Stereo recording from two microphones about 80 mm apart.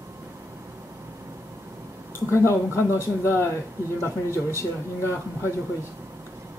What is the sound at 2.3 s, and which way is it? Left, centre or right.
Speech, left.